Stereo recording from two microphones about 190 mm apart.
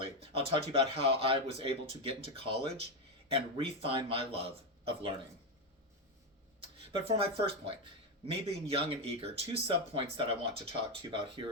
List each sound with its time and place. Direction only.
0.0 s speech: 30° right (ahead or behind)
7.0 s speech: 30° right (ahead or behind)